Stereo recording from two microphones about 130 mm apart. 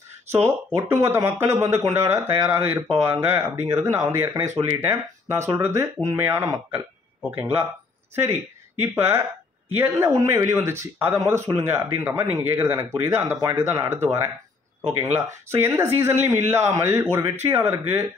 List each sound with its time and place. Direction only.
0.3 s speech: 20° right (ahead or behind)
8.8 s speech: 20° right (ahead or behind)